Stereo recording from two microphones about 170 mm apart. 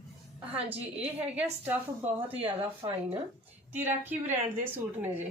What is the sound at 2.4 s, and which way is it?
Speech, 30° right (ahead or behind).